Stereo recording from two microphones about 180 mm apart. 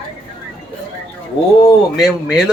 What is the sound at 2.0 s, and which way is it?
Speech, 5° right (ahead or behind).